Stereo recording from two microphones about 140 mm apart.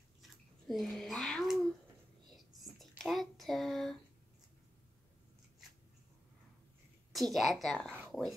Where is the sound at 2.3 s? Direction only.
Centre (ahead or behind).